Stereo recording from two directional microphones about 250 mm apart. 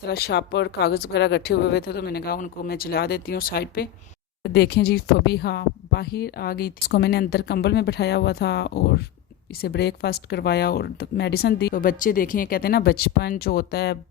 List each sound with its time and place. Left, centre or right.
0.0 s speech: left